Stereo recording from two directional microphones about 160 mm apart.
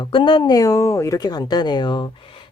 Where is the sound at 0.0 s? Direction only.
30° left (ahead or behind).